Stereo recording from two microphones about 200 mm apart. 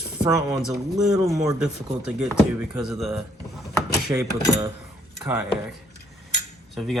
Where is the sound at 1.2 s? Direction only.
15° right (ahead or behind).